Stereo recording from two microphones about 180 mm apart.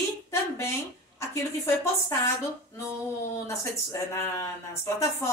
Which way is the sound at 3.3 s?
15° left (ahead or behind).